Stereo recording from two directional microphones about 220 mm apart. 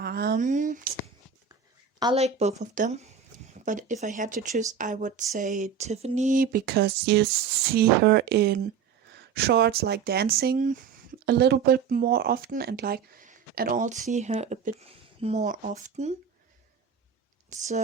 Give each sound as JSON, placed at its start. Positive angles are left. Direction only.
{"t": 0.0, "sound": "speech", "side_deg": -45}
{"t": 2.0, "sound": "speech", "side_deg": -25}
{"t": 17.5, "sound": "speech", "side_deg": -35}